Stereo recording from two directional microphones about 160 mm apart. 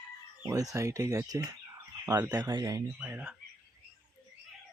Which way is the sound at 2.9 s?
10° right (ahead or behind).